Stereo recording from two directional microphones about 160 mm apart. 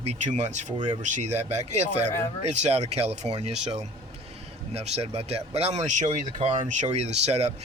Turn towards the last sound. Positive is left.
turn(degrees=-40)  # may be behind; listen again after turning